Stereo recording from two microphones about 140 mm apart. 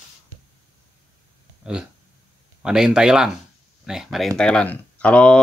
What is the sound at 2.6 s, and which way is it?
Speech, 5° right (ahead or behind).